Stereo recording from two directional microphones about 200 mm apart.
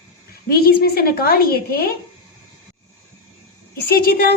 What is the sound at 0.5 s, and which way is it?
A woman's voice, 50° left (ahead or behind).